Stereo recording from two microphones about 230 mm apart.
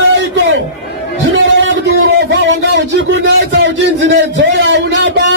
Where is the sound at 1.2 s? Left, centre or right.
Right.